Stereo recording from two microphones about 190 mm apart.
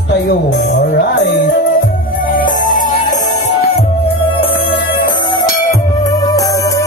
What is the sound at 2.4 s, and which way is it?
Music, 45° left (ahead or behind).